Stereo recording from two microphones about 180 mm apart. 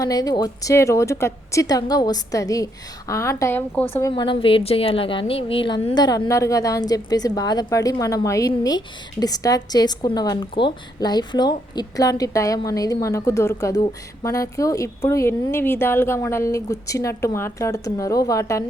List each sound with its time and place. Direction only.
0.0 s a woman's voice: 20° left (ahead or behind)
4.1 s a woman's voice: 30° left (ahead or behind)